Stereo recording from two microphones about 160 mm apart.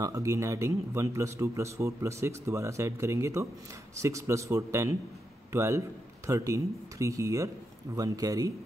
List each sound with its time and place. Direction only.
0.0 s a man's voice: 20° right (ahead or behind)